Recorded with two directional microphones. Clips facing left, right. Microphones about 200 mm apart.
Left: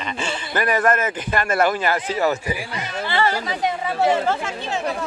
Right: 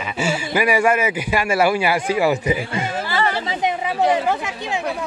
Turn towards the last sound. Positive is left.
turn(degrees=-15)  # may be behind; listen again after turning